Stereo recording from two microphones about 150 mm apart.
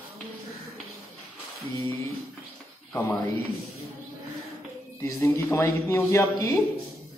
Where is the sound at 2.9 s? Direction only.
20° left (ahead or behind).